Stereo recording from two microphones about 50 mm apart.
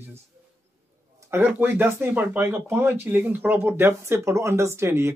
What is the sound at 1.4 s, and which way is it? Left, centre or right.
Speech, right.